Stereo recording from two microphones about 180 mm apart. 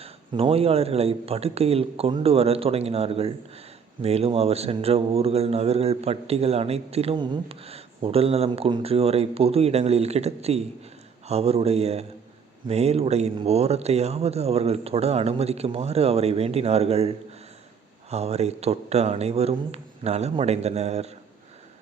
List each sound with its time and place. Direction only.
0.0 s speech: 30° right (ahead or behind)